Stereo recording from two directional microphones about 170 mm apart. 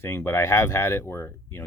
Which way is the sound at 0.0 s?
15° left (ahead or behind).